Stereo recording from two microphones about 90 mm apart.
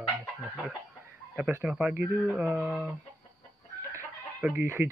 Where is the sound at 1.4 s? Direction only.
20° right (ahead or behind).